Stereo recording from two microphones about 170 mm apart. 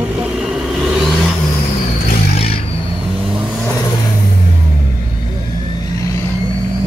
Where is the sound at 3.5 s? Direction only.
Centre (ahead or behind).